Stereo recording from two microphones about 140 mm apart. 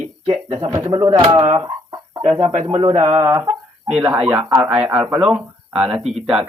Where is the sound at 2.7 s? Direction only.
35° right (ahead or behind).